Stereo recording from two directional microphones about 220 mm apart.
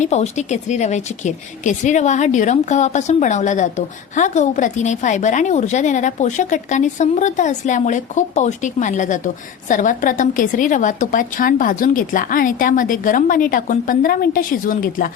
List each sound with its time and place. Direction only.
0.0 s speech: 30° left (ahead or behind)